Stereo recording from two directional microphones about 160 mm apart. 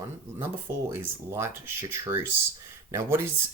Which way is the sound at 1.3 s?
15° right (ahead or behind).